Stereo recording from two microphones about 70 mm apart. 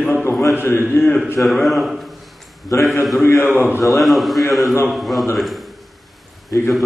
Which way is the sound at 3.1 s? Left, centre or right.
Left.